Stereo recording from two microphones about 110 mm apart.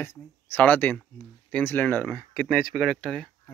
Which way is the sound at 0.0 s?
20° left (ahead or behind).